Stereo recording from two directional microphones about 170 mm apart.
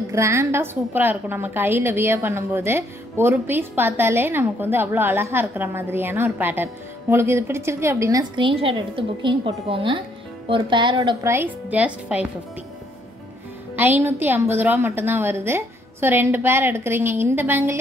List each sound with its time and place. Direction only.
0.1 s a woman's voice: 15° right (ahead or behind)
11.2 s a woman's voice: 10° right (ahead or behind)
13.7 s a woman's voice: 10° right (ahead or behind)